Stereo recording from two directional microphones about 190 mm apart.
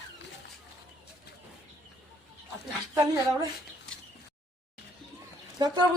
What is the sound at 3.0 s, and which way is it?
Speech, 20° right (ahead or behind).